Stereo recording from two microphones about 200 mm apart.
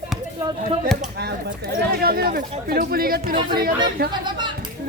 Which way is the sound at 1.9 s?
50° right (ahead or behind).